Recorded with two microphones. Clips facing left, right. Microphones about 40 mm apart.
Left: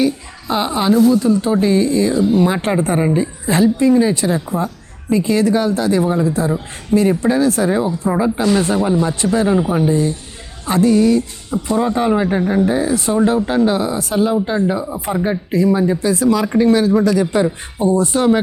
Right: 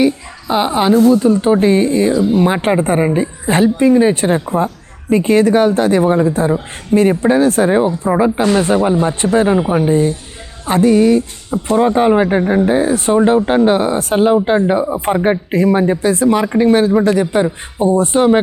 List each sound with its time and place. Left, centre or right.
0.0 s a woman's voice: centre
3.4 s a woman's voice: right
8.0 s speech: right
8.4 s a woman's voice: right
9.5 s a woman's voice: right